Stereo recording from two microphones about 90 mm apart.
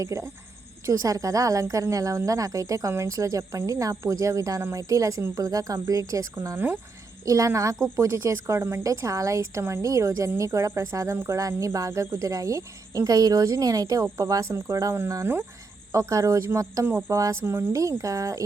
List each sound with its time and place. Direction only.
0.0 s a woman's voice: 35° right (ahead or behind)